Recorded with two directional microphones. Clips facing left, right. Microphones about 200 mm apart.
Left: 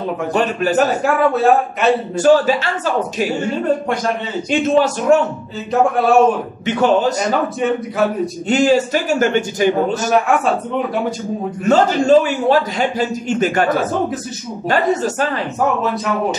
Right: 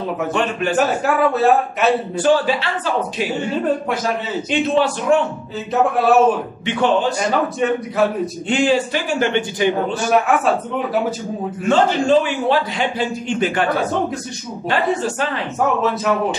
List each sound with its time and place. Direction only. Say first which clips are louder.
0.3 s a man's voice: left 4 dB; 40° left (ahead or behind)
0.7 s a man's voice: left 1 dB; centre (ahead or behind)
2.1 s a man's voice: left 4 dB; 45° left (ahead or behind)
4.5 s a man's voice: left 3 dB; 45° left (ahead or behind)
5.7 s a man's voice: left 1 dB; centre (ahead or behind)
6.6 s a man's voice: left 3 dB; 40° left (ahead or behind)
7.2 s a man's voice: even; centre (ahead or behind)
8.5 s a man's voice: left 3 dB; 40° left (ahead or behind)
10.1 s a man's voice: even; centre (ahead or behind)
11.6 s a man's voice: left 2 dB; 40° left (ahead or behind)
14.7 s a man's voice: left 3 dB; 40° left (ahead or behind)